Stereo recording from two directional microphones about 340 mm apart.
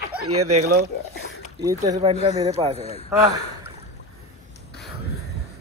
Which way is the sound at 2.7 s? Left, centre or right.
Centre.